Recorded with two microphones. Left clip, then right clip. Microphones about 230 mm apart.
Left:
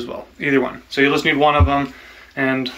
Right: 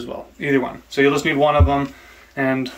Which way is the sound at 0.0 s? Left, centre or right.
Centre.